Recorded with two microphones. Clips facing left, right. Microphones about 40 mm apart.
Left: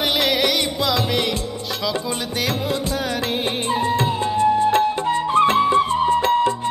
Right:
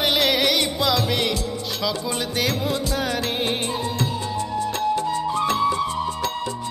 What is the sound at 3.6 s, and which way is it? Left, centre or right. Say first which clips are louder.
Music: left 6 dB; left.